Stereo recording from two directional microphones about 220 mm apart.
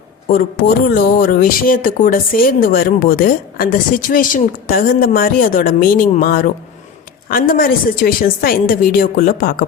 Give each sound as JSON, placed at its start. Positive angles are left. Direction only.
{"t": 0.3, "sound": "speech", "side_deg": 45}